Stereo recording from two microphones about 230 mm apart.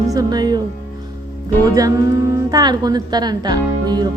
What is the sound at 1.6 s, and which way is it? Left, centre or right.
Speech, centre.